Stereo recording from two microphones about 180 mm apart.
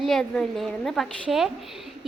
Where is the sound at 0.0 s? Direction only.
Centre (ahead or behind).